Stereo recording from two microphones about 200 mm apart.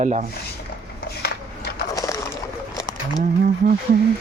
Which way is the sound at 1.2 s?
55° left (ahead or behind).